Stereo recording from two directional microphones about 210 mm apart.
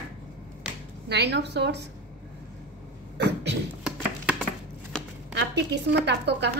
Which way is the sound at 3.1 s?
55° right (ahead or behind).